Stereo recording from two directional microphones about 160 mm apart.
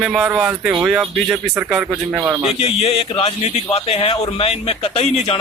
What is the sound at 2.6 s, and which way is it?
Speech, 40° left (ahead or behind).